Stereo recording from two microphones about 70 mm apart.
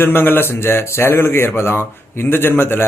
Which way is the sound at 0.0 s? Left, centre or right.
Left.